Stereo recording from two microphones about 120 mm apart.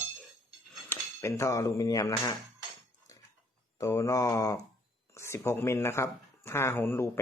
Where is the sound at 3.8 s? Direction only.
25° left (ahead or behind).